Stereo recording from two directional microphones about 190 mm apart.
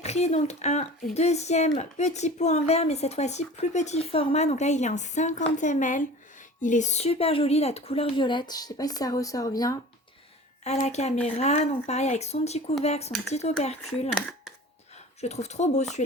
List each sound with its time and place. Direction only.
0.0 s speech: 35° left (ahead or behind); by 9.7 s 20° left (ahead or behind)
10.6 s speech: 35° left (ahead or behind)
14.2 s a sound: 5° left (ahead or behind)
15.2 s speech: 35° left (ahead or behind)